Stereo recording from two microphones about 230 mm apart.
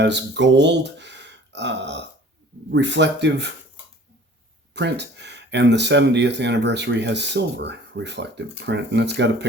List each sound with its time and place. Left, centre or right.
0.0 s speech: right
4.7 s speech: right